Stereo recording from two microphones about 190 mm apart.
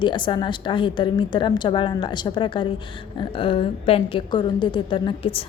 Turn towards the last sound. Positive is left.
turn(degrees=30)  # may be behind; listen again after turning